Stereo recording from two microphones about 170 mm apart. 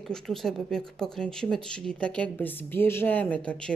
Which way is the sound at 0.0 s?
5° left (ahead or behind).